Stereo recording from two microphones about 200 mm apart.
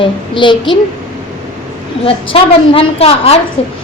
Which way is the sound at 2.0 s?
25° left (ahead or behind).